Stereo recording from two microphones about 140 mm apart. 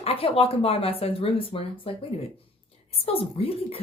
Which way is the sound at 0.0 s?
45° left (ahead or behind).